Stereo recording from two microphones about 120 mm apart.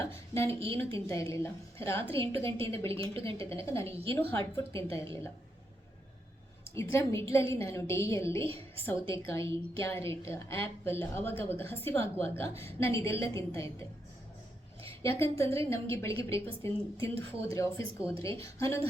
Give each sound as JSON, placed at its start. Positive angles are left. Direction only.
{"t": 0.0, "sound": "a woman's voice", "side_deg": 20}
{"t": 3.0, "sound": "a woman's voice", "side_deg": -50}
{"t": 3.4, "sound": "a woman's voice", "side_deg": 25}
{"t": 6.7, "sound": "a woman's voice", "side_deg": 25}
{"t": 8.4, "sound": "a woman's voice", "side_deg": -50}
{"t": 9.0, "sound": "a woman's voice", "side_deg": 25}
{"t": 15.2, "sound": "a woman's voice", "side_deg": 20}